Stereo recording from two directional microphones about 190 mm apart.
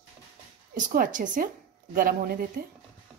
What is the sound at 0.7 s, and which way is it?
Speech, 45° right (ahead or behind).